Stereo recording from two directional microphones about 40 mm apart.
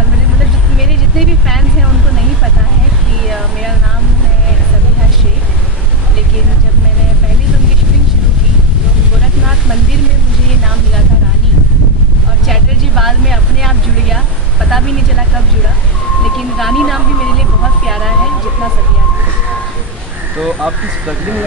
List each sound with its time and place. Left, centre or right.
0.7 s vehicle: centre
3.3 s a sound: centre
12.4 s vehicle: centre
16.3 s a sound: centre
17.8 s vehicle: centre
20.3 s speech: centre